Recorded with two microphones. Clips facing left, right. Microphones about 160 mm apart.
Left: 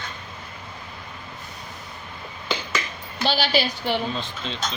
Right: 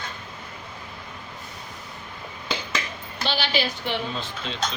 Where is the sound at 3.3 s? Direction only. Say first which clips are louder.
Left 3 dB; 40° left (ahead or behind).